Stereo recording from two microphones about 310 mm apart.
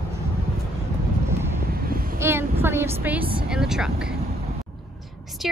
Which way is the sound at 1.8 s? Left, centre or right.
Right.